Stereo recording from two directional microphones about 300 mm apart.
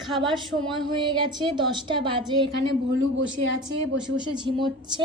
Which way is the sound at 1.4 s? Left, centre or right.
Centre.